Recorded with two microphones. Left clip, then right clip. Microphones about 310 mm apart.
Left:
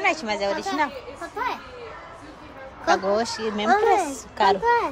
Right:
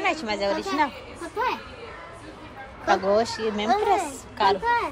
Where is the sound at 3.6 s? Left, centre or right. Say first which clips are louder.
Left 4 dB; left.